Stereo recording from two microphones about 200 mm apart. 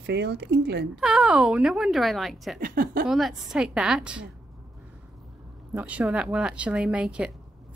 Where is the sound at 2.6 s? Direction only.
45° right (ahead or behind).